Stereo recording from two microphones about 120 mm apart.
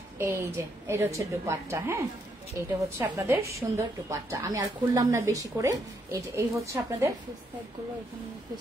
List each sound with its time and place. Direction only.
0.2 s a woman's voice: 20° right (ahead or behind)